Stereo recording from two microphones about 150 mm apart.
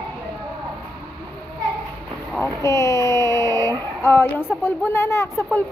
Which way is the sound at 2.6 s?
20° left (ahead or behind).